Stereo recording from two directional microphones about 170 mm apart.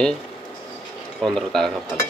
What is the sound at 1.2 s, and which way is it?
Speech, centre (ahead or behind).